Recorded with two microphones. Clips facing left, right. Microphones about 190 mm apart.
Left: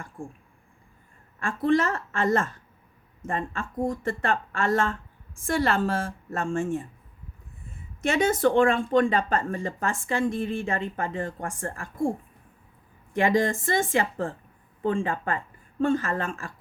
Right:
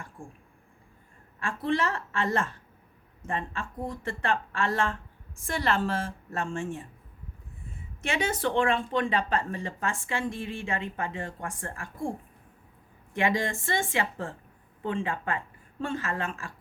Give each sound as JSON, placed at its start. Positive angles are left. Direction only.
{"t": 1.4, "sound": "speech", "side_deg": 45}
{"t": 8.0, "sound": "speech", "side_deg": 45}
{"t": 13.1, "sound": "speech", "side_deg": 40}